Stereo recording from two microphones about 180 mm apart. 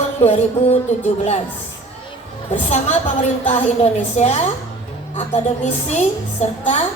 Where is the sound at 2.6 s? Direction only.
40° left (ahead or behind).